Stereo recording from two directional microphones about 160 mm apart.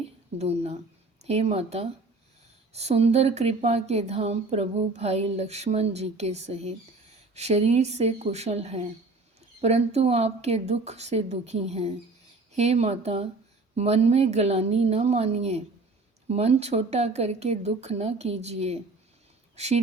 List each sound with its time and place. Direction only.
0.3 s speech: 40° right (ahead or behind)